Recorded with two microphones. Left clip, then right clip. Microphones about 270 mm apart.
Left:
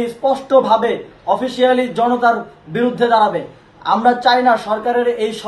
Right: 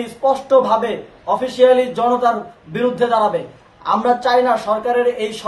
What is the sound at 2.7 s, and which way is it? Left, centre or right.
Speech, right.